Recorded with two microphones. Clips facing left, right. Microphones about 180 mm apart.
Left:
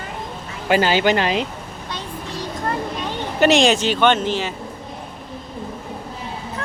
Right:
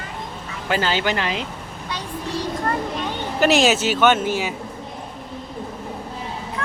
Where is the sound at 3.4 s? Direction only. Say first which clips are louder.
Left 2 dB; 5° right (ahead or behind).